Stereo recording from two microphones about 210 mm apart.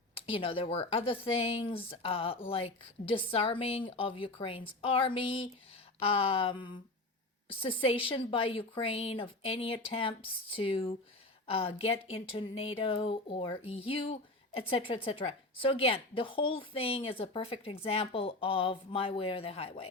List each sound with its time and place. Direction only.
0.1 s speech: 25° left (ahead or behind)
7.9 s speech: 25° left (ahead or behind)